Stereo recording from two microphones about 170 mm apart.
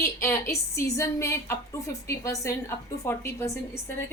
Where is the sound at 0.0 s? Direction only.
15° left (ahead or behind).